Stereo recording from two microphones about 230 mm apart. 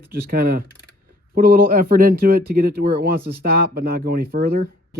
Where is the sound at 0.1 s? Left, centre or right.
Right.